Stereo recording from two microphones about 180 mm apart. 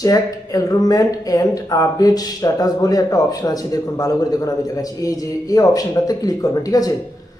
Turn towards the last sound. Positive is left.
turn(degrees=20)  # may be behind; listen again after turning